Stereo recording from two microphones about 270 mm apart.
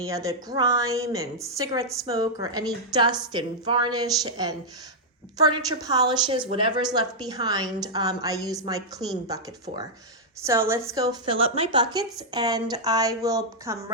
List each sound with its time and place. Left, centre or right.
0.0 s a woman's voice: centre
10.4 s a woman's voice: centre